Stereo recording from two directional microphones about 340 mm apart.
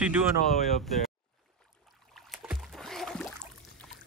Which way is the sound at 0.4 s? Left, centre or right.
Centre.